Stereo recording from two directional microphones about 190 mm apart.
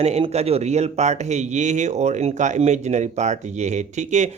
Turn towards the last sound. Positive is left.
turn(degrees=-40)  # may be behind; listen again after turning